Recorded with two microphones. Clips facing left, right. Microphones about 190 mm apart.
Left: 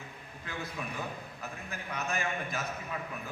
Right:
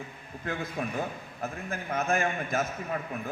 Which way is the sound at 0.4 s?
45° right (ahead or behind).